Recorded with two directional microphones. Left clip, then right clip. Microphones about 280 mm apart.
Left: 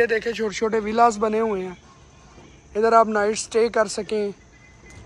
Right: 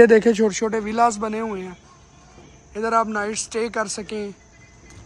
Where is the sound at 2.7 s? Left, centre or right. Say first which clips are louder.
Left 4 dB; centre.